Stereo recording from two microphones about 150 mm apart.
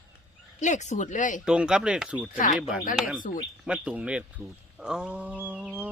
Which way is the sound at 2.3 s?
60° left (ahead or behind).